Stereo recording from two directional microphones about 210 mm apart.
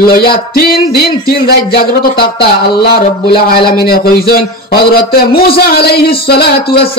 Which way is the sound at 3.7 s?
45° left (ahead or behind).